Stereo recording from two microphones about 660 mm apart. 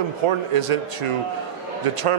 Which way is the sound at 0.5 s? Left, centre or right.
Right.